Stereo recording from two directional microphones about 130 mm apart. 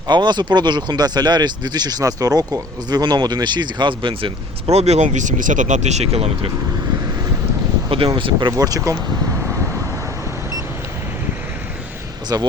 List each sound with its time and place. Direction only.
0.1 s speech: 35° right (ahead or behind); by 6.3 s 50° right (ahead or behind)
7.9 s speech: 40° right (ahead or behind); by 9.0 s 25° right (ahead or behind)
12.3 s speech: 25° right (ahead or behind)